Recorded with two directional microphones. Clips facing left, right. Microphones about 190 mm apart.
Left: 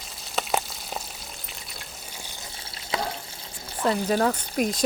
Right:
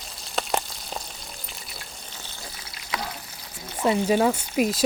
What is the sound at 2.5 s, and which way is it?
Water, 30° left (ahead or behind).